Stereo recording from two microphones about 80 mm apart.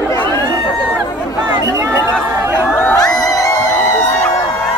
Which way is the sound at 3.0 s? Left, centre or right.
Left.